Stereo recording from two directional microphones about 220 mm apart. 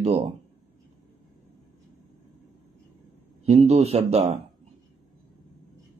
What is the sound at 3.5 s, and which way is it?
Speech, 30° right (ahead or behind).